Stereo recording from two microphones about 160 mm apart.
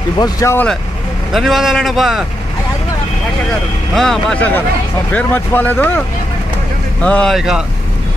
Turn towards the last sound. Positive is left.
turn(degrees=-5)  # may be behind; listen again after turning